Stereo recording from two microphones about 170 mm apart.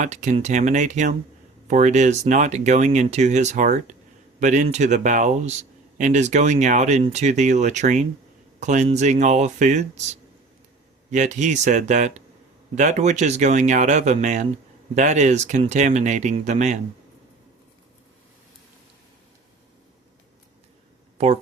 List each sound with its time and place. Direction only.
0.0 s speech: 45° right (ahead or behind)